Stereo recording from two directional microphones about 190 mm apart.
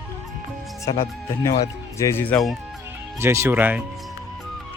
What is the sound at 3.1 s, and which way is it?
Speech, 15° right (ahead or behind).